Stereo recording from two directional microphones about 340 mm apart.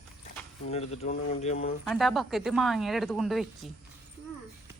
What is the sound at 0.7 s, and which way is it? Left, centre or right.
Speech, centre.